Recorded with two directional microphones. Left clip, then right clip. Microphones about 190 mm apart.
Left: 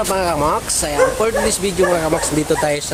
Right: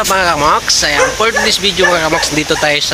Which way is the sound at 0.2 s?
Centre (ahead or behind).